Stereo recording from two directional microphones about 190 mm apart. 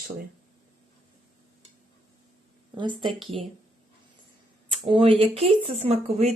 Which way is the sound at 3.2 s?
Centre (ahead or behind).